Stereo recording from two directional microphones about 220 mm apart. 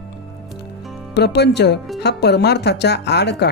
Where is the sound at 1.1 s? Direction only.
50° left (ahead or behind).